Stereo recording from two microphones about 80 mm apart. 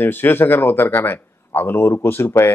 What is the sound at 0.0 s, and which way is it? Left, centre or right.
A man's voice, left.